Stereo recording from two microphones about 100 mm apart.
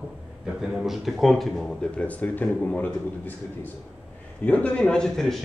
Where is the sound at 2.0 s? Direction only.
15° left (ahead or behind).